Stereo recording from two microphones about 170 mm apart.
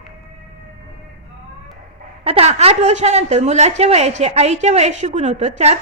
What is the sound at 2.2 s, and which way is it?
A woman's voice, 35° right (ahead or behind).